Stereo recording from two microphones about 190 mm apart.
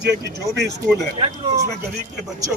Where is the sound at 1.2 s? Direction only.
20° right (ahead or behind).